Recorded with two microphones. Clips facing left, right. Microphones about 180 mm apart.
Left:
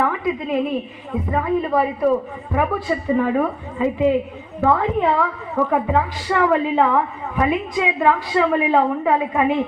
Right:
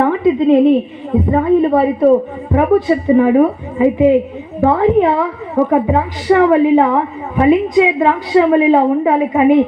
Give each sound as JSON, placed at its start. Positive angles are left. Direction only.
{"t": 0.0, "sound": "a woman's voice", "side_deg": -25}